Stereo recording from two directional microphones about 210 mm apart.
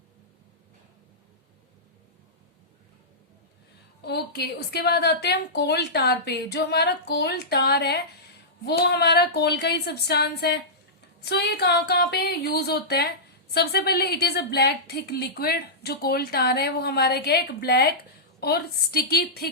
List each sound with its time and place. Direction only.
4.0 s speech: 50° left (ahead or behind)